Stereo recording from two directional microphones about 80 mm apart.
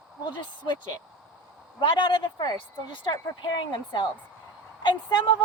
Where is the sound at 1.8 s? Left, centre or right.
Left.